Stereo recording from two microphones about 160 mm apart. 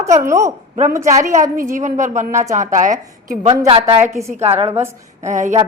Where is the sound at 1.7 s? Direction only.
50° right (ahead or behind).